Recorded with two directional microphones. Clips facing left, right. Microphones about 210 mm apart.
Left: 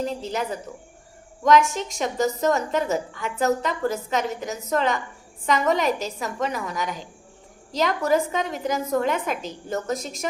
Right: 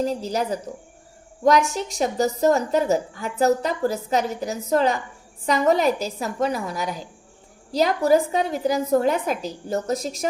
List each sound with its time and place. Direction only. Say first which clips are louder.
0.0 s a woman's voice: right 3 dB; 40° right (ahead or behind)